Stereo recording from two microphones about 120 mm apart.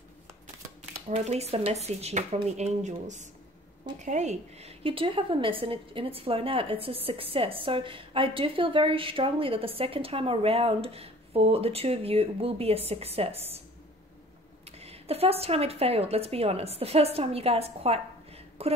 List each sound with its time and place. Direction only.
1.1 s a woman's voice: 65° right (ahead or behind)
14.8 s speech: 55° right (ahead or behind)